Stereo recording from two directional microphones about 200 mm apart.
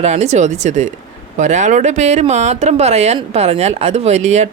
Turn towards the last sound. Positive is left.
turn(degrees=-35)  # may be behind; listen again after turning